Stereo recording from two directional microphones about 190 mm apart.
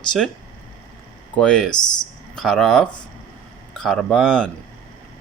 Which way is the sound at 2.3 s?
5° left (ahead or behind).